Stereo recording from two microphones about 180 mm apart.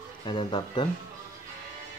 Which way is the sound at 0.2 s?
25° left (ahead or behind).